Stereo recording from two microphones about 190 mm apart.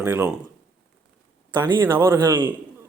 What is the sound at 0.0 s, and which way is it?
Speech, 10° right (ahead or behind).